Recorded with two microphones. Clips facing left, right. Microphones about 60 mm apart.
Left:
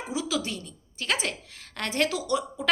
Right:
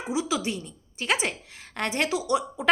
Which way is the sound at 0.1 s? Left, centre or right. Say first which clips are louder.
Right 3 dB; centre.